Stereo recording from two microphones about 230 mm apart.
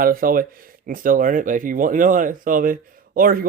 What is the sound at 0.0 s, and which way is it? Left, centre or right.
Speech, right.